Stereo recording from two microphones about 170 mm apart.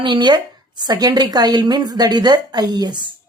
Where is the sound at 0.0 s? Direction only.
25° right (ahead or behind).